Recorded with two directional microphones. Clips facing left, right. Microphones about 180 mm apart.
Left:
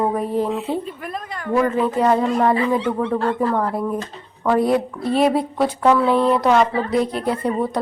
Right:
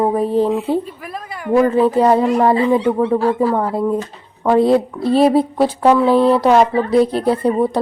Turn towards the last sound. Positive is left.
turn(degrees=-30)  # may be behind; listen again after turning